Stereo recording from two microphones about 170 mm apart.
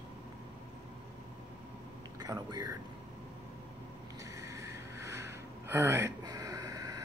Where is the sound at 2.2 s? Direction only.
20° right (ahead or behind).